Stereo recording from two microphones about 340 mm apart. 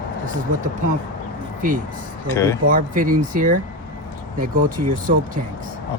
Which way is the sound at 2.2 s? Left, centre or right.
Centre.